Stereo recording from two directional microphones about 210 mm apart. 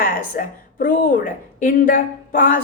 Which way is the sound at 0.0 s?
40° left (ahead or behind).